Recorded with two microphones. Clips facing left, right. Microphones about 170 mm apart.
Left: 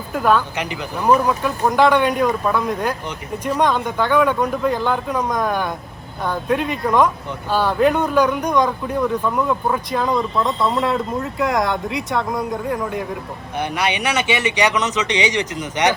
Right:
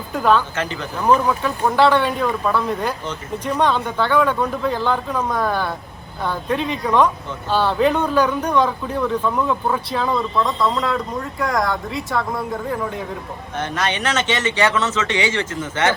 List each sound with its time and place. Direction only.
0.1 s speech: 10° left (ahead or behind)
13.6 s speech: 15° left (ahead or behind)